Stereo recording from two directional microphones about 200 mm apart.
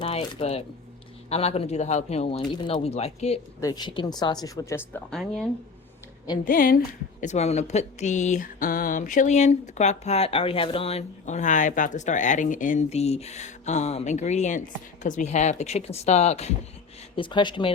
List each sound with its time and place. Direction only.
0.0 s a sound: 25° left (ahead or behind)
1.3 s speech: 30° left (ahead or behind)
3.6 s speech: 20° left (ahead or behind)
5.1 s speech: centre (ahead or behind)
6.4 s a woman's voice: 45° left (ahead or behind)
7.2 s speech: 35° left (ahead or behind)